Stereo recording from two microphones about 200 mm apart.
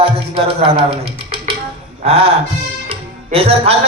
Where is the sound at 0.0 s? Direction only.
30° right (ahead or behind).